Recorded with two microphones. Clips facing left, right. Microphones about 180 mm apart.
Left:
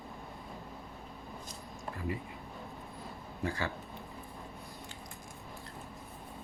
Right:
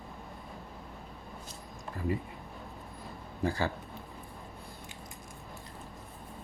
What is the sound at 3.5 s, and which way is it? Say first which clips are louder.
Speech: right 4 dB; 35° right (ahead or behind).